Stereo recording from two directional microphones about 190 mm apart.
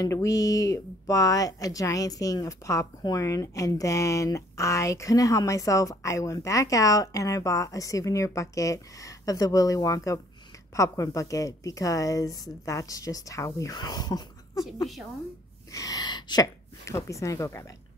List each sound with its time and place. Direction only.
0.0 s speech: 15° left (ahead or behind)
15.7 s speech: 20° left (ahead or behind)